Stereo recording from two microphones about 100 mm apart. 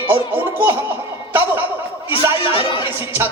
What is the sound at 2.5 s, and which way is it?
Music, 55° left (ahead or behind).